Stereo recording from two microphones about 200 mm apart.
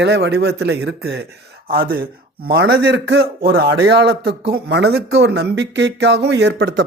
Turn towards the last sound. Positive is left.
turn(degrees=-60)  # may be behind; listen again after turning